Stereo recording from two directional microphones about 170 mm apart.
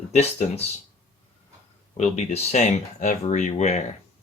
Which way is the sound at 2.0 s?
40° left (ahead or behind).